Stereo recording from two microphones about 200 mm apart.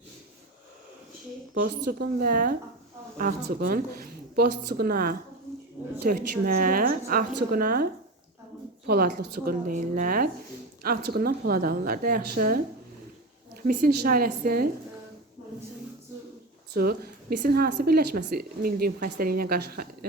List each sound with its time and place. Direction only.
1.5 s speech: 45° right (ahead or behind)
8.9 s speech: 50° right (ahead or behind)
13.7 s speech: 45° right (ahead or behind)
16.7 s speech: 50° right (ahead or behind)